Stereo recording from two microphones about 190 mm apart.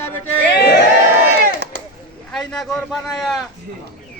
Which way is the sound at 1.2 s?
55° right (ahead or behind).